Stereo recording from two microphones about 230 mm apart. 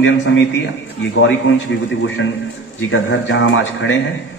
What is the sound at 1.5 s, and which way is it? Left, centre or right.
A man's voice, left.